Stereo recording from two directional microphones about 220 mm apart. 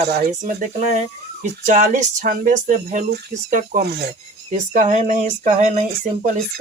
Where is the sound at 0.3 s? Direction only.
35° right (ahead or behind).